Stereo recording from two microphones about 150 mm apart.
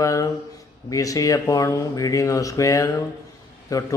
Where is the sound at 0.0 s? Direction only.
20° left (ahead or behind).